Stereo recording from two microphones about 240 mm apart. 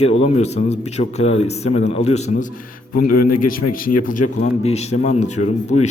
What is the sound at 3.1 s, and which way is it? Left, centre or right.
Speech, left.